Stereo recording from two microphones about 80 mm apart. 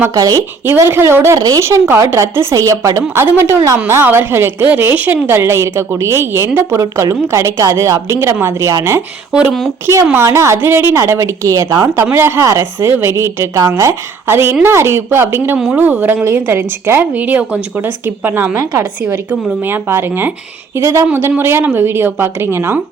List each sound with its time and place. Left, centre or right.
0.1 s speech: right
0.6 s speech: right
1.4 s speech: right
1.6 s speech: right
3.8 s a woman's voice: right
9.8 s a woman's voice: right
18.5 s a woman's voice: right
20.7 s speech: right
21.1 s a woman's voice: right